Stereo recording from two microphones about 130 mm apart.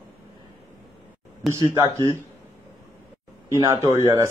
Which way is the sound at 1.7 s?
20° right (ahead or behind).